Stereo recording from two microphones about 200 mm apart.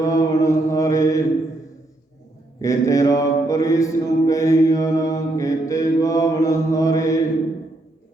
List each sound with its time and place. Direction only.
0.0 s mantra: 15° left (ahead or behind)
2.6 s mantra: 15° left (ahead or behind)